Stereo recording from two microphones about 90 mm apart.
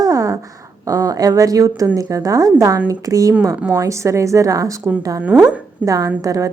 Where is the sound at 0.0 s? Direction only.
40° right (ahead or behind).